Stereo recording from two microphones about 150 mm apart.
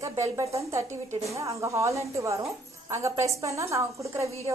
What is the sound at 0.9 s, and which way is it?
Speech, 50° right (ahead or behind).